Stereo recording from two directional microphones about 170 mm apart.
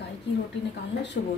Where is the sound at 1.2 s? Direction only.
65° left (ahead or behind).